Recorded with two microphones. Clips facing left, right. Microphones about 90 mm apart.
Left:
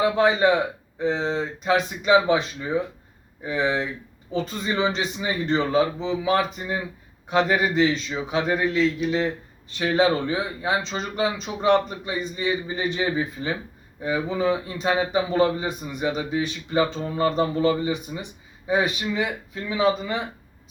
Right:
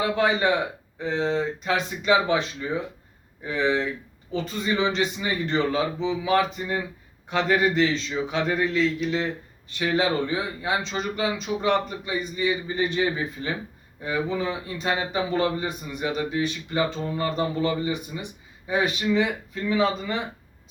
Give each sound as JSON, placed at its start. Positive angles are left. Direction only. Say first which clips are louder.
{"t": 0.0, "sound": "a man's voice", "louder": "left 3 dB", "side_deg": 20}